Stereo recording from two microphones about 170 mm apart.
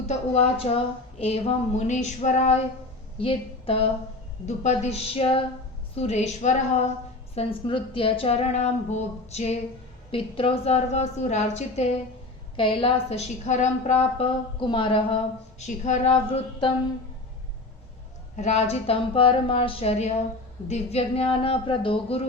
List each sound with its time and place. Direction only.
0.1 s speech: 40° left (ahead or behind)
1.2 s a sound: 35° left (ahead or behind)
3.2 s a woman's voice: 35° left (ahead or behind)
4.4 s speech: 45° left (ahead or behind)
7.3 s speech: 30° left (ahead or behind)
12.5 s speech: 30° left (ahead or behind)
14.0 s speech: 35° left (ahead or behind)
15.6 s speech: 45° left (ahead or behind)
18.3 s speech: 40° left (ahead or behind)